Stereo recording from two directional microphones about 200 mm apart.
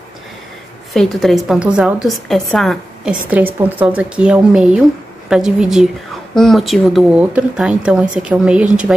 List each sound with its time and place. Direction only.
0.9 s a woman's voice: centre (ahead or behind)